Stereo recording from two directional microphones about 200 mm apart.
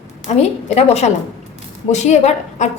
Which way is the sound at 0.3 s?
30° left (ahead or behind).